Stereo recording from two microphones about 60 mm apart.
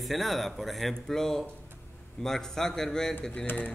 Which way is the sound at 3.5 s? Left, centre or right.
Left.